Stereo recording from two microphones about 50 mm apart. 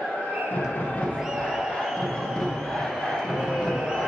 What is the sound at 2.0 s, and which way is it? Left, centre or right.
Music, centre.